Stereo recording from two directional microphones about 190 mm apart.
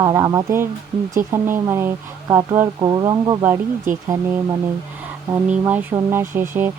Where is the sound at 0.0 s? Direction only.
20° right (ahead or behind).